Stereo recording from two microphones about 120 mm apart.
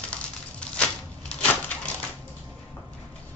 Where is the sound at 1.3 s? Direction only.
5° left (ahead or behind).